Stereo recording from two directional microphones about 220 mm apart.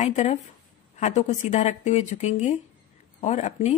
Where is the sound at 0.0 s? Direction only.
30° left (ahead or behind).